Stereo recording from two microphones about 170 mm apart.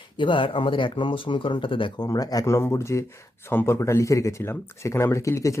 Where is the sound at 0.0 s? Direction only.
30° left (ahead or behind).